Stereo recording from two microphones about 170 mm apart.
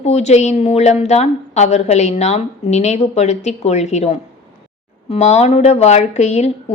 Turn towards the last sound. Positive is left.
turn(degrees=40)  # may be behind; listen again after turning